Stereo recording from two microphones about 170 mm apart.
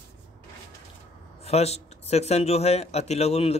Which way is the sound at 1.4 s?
40° left (ahead or behind).